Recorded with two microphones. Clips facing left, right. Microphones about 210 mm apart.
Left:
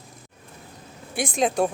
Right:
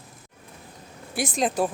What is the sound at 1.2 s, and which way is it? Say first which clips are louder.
Speech: left 2 dB; centre (ahead or behind).